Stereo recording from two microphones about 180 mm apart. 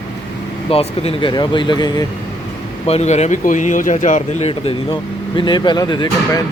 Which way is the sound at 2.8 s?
35° left (ahead or behind).